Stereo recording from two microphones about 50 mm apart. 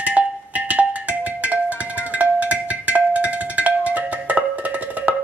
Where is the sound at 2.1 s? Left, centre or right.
Right.